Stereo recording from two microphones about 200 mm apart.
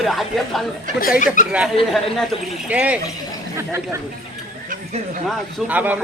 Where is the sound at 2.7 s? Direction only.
5° right (ahead or behind).